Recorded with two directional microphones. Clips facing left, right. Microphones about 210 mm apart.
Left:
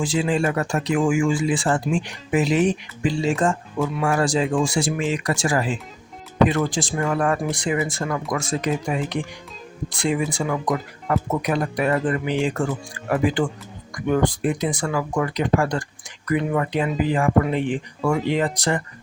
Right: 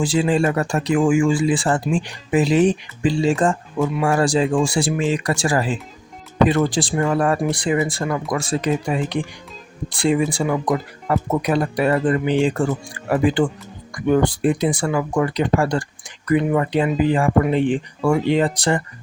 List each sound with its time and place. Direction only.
0.0 s speech: 35° right (ahead or behind)